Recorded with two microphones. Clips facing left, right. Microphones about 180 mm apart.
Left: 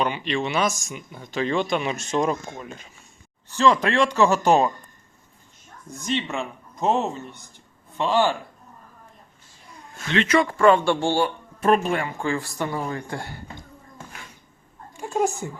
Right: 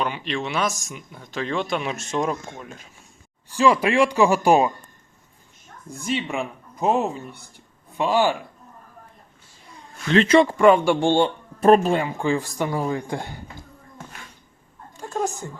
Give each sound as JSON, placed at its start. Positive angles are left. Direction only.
{"t": 0.0, "sound": "speech", "side_deg": 0}
{"t": 6.0, "sound": "speech", "side_deg": -10}
{"t": 10.1, "sound": "a man's voice", "side_deg": -30}
{"t": 10.6, "sound": "speech", "side_deg": -10}
{"t": 11.6, "sound": "speech", "side_deg": -35}
{"t": 11.9, "sound": "speech", "side_deg": -15}
{"t": 14.9, "sound": "a sound", "side_deg": 10}